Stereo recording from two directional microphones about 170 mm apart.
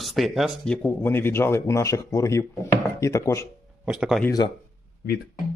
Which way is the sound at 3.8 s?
5° right (ahead or behind).